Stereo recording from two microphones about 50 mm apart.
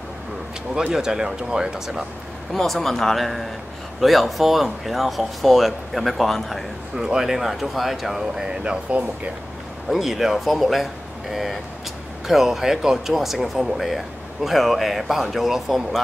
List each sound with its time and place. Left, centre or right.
0.7 s speech: centre
2.5 s speech: centre
7.0 s speech: centre
8.6 s speech: right
9.8 s speech: centre